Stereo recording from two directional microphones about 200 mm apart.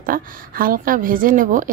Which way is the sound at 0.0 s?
45° right (ahead or behind).